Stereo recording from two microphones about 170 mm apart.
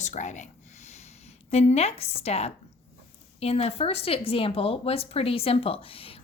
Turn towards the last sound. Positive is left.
turn(degrees=35)  # may be behind; listen again after turning